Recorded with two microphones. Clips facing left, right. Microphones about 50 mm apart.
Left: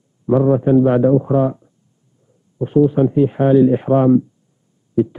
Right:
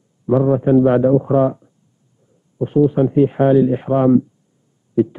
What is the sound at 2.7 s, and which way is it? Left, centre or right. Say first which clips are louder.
Speech: left 1 dB; centre.